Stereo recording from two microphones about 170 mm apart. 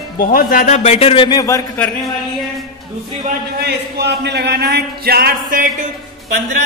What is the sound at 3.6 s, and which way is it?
Speech, 75° right (ahead or behind).